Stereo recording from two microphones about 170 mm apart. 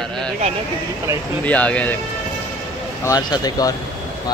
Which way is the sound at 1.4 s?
10° left (ahead or behind).